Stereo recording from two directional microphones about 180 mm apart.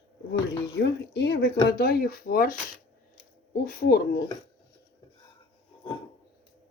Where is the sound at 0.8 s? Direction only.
70° left (ahead or behind).